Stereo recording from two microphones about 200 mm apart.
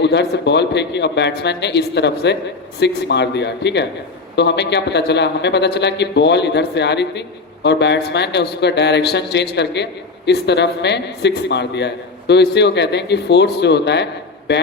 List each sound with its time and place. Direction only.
0.0 s speech: 60° left (ahead or behind)